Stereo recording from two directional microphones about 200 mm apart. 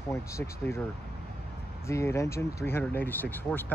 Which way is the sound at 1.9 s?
15° left (ahead or behind).